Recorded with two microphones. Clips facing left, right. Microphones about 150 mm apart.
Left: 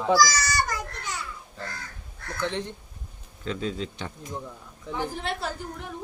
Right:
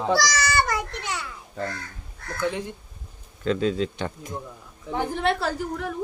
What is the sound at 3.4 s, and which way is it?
A man's voice, 75° right (ahead or behind).